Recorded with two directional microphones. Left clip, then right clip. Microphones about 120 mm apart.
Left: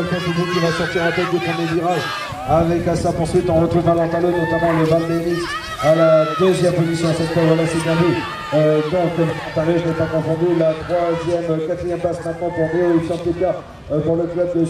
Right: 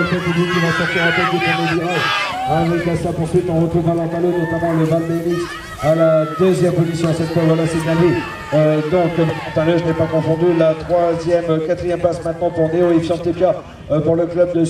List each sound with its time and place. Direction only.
0.4 s a man's voice: centre (ahead or behind)
4.6 s speech: 35° left (ahead or behind)
6.5 s a man's voice: centre (ahead or behind)